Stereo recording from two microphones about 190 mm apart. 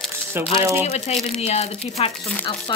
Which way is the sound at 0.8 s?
35° left (ahead or behind).